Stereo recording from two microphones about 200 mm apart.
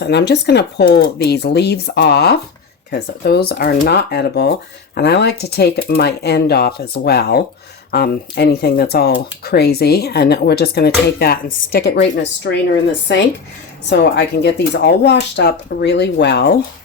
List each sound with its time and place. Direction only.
0.0 s speech: 60° left (ahead or behind)
13.9 s speech: 60° left (ahead or behind)